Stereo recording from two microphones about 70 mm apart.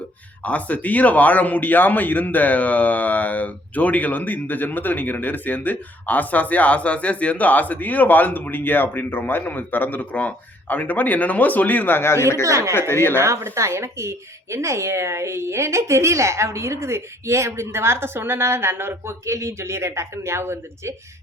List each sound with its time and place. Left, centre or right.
0.4 s a man's voice: left
12.4 s speech: right
12.9 s speech: left
13.1 s speech: right